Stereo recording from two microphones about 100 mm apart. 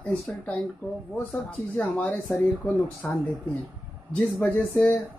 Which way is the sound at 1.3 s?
15° left (ahead or behind).